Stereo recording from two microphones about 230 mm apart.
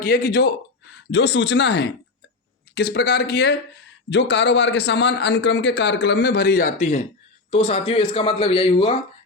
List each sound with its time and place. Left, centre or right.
0.0 s a man's voice: left